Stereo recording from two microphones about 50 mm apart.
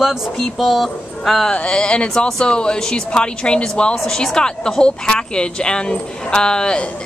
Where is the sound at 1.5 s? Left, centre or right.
Left.